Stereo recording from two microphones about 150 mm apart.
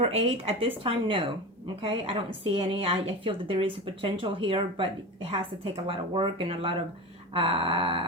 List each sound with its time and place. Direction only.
0.0 s a woman's voice: 40° right (ahead or behind)